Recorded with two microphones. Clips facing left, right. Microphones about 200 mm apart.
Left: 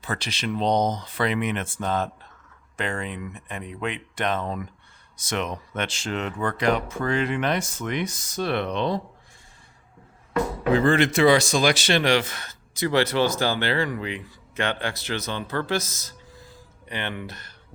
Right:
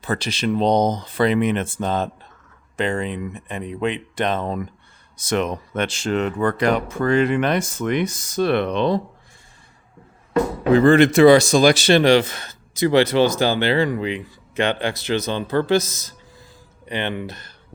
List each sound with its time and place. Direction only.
0.0 s speech: 35° right (ahead or behind); by 9.0 s 70° right (ahead or behind)
10.8 s speech: 55° right (ahead or behind); by 17.5 s 25° right (ahead or behind)